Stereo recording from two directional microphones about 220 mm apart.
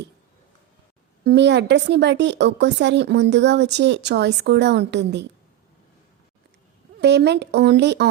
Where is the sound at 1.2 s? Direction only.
50° right (ahead or behind).